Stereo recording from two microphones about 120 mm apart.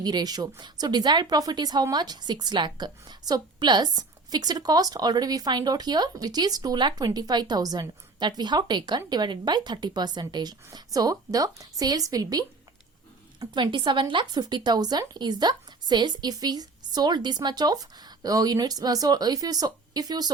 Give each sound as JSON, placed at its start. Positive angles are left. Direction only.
{"t": 0.0, "sound": "a woman's voice", "side_deg": -35}